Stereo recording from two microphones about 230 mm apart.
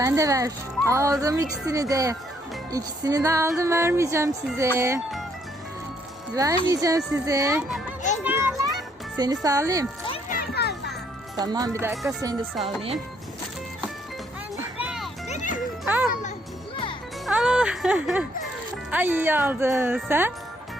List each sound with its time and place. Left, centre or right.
0.0 s speech: centre
6.3 s speech: centre
8.2 s children playing: centre
9.1 s speech: centre
10.2 s a sound: left
11.3 s speech: centre
12.5 s speech: centre
14.5 s music: centre
15.3 s music: left
15.8 s a child's voice: centre
17.2 s speech: centre